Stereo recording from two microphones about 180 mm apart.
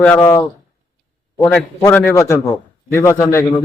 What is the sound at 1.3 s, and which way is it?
Speech, 10° left (ahead or behind).